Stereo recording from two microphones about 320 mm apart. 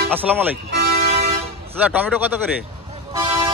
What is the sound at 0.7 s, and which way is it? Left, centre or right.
Toot, right.